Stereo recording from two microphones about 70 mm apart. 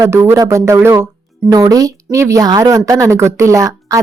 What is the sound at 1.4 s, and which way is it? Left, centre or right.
A woman's voice, right.